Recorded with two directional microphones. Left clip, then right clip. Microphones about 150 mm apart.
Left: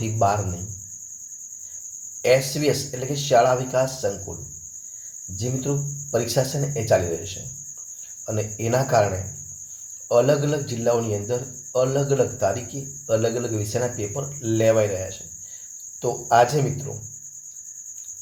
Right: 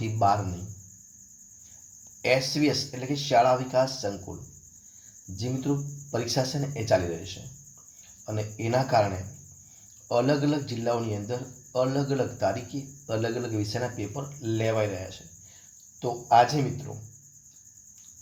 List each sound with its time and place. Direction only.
2.2 s cricket: 15° left (ahead or behind)
5.4 s cricket: 15° left (ahead or behind)
8.4 s cricket: 20° left (ahead or behind)
10.1 s cricket: 15° left (ahead or behind)